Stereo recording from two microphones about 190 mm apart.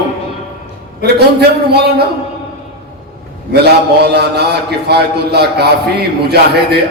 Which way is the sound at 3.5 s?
60° right (ahead or behind).